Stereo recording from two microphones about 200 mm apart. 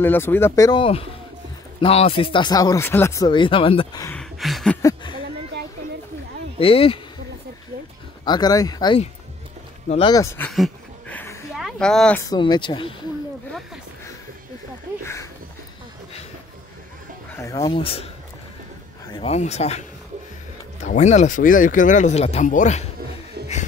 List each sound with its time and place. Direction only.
0.0 s speech: 10° left (ahead or behind)
4.1 s a sound: centre (ahead or behind)
6.6 s speech: 30° left (ahead or behind)
8.3 s speech: 20° left (ahead or behind)
10.5 s a sound: 5° left (ahead or behind)
12.2 s speech: 20° left (ahead or behind)
17.4 s speech: 15° left (ahead or behind)
19.1 s speech: 30° left (ahead or behind)
20.8 s speech: 35° left (ahead or behind)